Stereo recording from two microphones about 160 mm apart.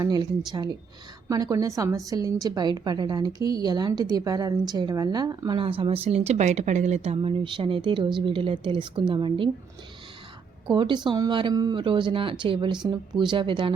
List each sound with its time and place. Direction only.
0.0 s a woman's voice: 25° right (ahead or behind)
10.7 s a woman's voice: 30° right (ahead or behind)